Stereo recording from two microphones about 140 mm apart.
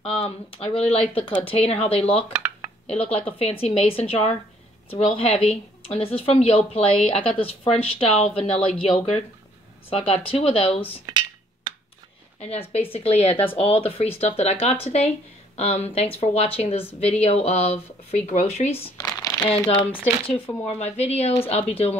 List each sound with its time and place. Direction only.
0.0 s a woman's voice: 40° left (ahead or behind)
11.1 s a sound: 30° right (ahead or behind)
12.7 s a woman's voice: 45° left (ahead or behind)
18.9 s crumpling: 25° left (ahead or behind)
19.4 s speech: 10° left (ahead or behind)
19.7 s a woman's voice: 35° left (ahead or behind)